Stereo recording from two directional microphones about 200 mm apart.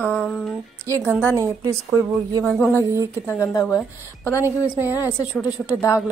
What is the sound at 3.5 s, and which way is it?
Speech, 15° left (ahead or behind).